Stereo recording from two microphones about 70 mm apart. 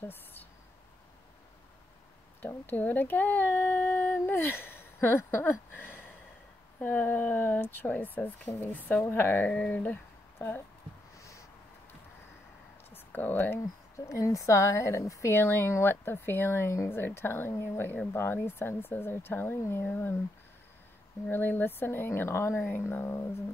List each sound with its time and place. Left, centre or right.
0.1 s a sound: left
2.4 s speech: left
9.5 s speech: centre
12.9 s speech: left
13.9 s a woman's voice: left
15.3 s speech: left
21.3 s speech: left